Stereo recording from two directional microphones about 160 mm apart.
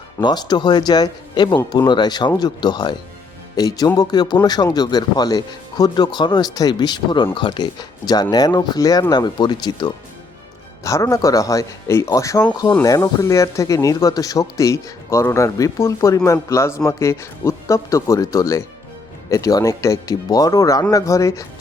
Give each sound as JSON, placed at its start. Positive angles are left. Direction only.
{"t": 0.2, "sound": "speech", "side_deg": 25}